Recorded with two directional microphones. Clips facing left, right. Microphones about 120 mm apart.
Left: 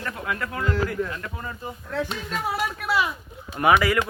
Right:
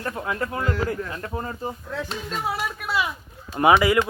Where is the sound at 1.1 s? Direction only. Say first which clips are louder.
Right 4 dB; 35° right (ahead or behind).